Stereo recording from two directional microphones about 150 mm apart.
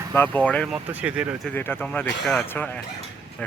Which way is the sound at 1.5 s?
15° left (ahead or behind).